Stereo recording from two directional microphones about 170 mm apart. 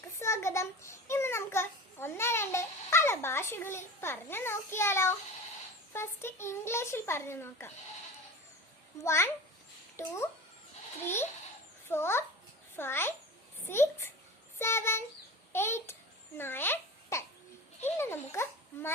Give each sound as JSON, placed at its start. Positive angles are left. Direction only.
{"t": 0.2, "sound": "a sound", "side_deg": 15}
{"t": 5.9, "sound": "a child's voice", "side_deg": 15}
{"t": 9.0, "sound": "a child's voice", "side_deg": 15}